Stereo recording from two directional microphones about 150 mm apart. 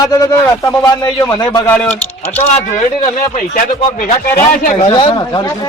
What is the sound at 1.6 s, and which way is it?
Speech, 10° left (ahead or behind).